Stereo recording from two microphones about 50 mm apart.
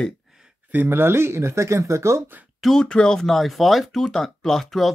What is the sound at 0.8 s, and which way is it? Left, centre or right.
Speech, right.